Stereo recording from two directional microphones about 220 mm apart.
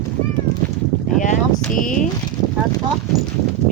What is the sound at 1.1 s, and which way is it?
Speech, 35° left (ahead or behind).